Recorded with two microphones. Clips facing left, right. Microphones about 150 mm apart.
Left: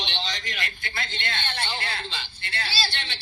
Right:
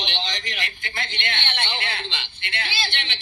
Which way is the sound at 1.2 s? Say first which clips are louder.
Right 1 dB; 20° right (ahead or behind).